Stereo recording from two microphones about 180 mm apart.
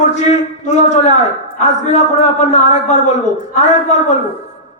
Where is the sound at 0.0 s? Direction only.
40° left (ahead or behind).